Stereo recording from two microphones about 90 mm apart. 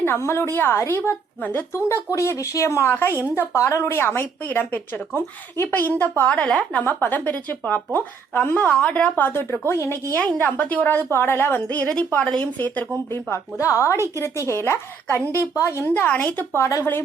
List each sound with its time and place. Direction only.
0.0 s a woman's voice: 30° left (ahead or behind)
3.1 s speech: 25° right (ahead or behind)
3.3 s a woman's voice: 35° left (ahead or behind)
10.6 s a woman's voice: 20° left (ahead or behind)
13.3 s a woman's voice: 35° left (ahead or behind)